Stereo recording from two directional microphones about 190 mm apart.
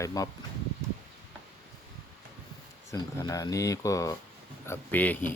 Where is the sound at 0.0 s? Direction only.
15° left (ahead or behind).